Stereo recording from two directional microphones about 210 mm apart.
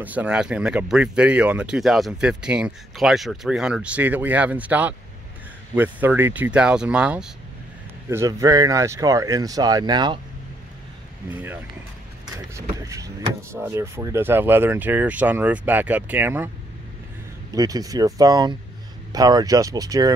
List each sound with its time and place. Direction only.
0.0 s speech: 5° right (ahead or behind)
12.4 s speech: 15° right (ahead or behind)
17.6 s speech: 15° right (ahead or behind)